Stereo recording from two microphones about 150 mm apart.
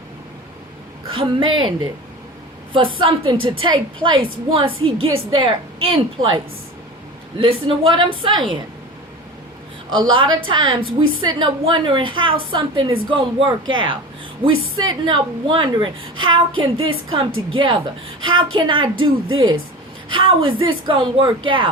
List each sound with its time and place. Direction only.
1.1 s a woman's voice: 35° right (ahead or behind)
2.7 s a woman's voice: 35° right (ahead or behind)
10.0 s a woman's voice: 35° right (ahead or behind)
15.0 s a woman's voice: 35° right (ahead or behind)